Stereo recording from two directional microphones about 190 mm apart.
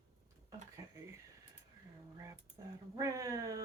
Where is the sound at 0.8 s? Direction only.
15° right (ahead or behind).